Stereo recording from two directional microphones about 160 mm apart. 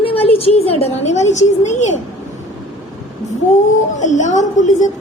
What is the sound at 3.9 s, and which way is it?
Speech, 50° left (ahead or behind).